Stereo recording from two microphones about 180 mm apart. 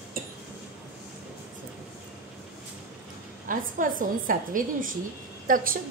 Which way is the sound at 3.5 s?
50° right (ahead or behind).